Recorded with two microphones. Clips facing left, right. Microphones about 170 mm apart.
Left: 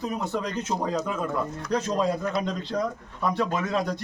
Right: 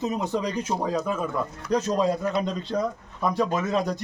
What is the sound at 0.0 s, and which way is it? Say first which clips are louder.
Speech: right 3 dB; 15° right (ahead or behind).